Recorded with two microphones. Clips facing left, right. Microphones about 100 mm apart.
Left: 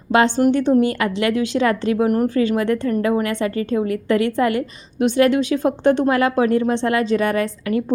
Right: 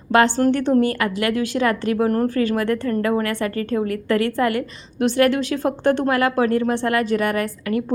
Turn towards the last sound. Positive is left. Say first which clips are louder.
# left 2 dB
turn(degrees=25)  # may be behind; listen again after turning